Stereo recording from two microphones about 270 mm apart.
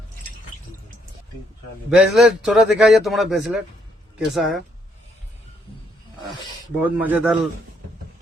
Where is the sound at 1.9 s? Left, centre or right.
Centre.